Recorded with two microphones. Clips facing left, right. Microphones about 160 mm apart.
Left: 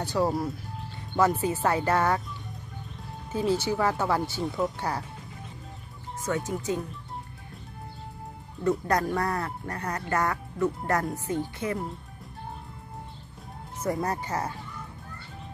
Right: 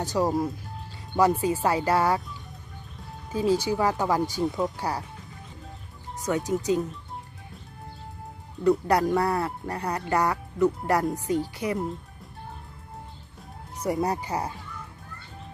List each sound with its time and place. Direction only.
0.2 s speech: 15° right (ahead or behind)
3.3 s speech: 10° right (ahead or behind)
6.2 s speech: 15° right (ahead or behind)
8.6 s speech: 15° right (ahead or behind)
13.8 s speech: 15° right (ahead or behind)